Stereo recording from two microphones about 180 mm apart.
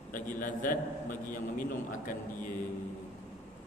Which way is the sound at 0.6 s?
50° left (ahead or behind).